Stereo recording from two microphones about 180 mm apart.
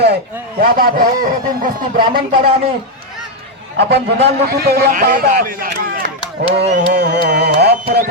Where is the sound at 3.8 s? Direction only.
70° right (ahead or behind); by 6.1 s 55° right (ahead or behind).